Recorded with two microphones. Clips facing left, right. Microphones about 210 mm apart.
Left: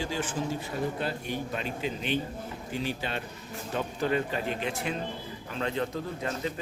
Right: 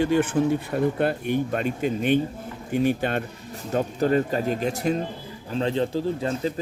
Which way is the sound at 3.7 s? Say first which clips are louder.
Right 7 dB; 40° right (ahead or behind).